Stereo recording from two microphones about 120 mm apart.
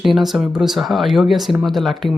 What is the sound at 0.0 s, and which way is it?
Speech, centre (ahead or behind).